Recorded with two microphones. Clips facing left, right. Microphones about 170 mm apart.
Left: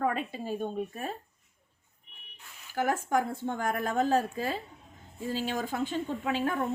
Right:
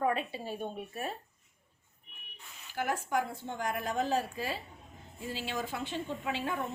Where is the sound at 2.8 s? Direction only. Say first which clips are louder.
Left 4 dB; 50° left (ahead or behind).